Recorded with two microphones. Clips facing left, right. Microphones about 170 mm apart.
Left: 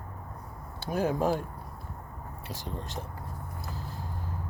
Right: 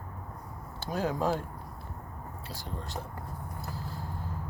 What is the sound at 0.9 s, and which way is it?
Speech, 15° left (ahead or behind).